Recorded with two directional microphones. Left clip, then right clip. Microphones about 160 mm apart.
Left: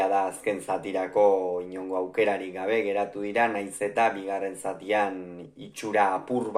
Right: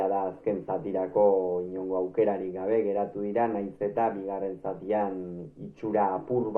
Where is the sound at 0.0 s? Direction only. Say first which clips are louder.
Left 3 dB; 25° left (ahead or behind).